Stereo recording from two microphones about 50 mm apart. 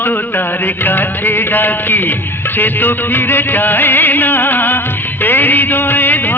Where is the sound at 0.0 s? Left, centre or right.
Left.